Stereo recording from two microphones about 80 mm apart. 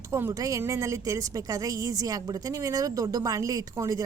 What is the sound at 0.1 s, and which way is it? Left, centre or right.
A woman's voice, right.